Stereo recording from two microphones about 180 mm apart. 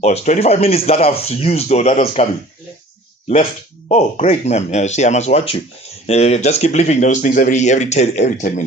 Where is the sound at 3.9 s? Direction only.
35° left (ahead or behind).